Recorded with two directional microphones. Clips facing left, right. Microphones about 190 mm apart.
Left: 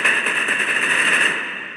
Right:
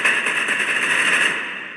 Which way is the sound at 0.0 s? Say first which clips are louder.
Left 1 dB; 40° left (ahead or behind).